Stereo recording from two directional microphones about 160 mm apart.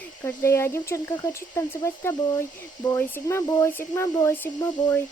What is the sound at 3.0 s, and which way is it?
Speech, 15° left (ahead or behind).